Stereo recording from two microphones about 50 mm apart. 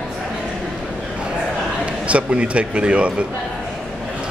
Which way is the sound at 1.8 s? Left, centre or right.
Right.